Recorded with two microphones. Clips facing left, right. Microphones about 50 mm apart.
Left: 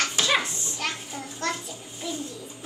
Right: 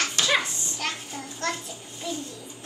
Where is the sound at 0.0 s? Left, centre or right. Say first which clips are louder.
Even; centre.